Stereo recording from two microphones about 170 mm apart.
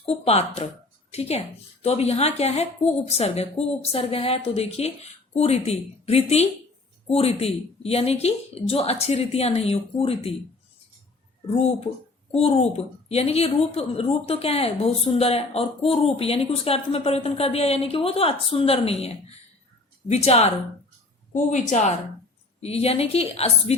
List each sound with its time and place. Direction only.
0.0 s a woman's voice: 35° left (ahead or behind)
12.3 s a woman's voice: 35° left (ahead or behind)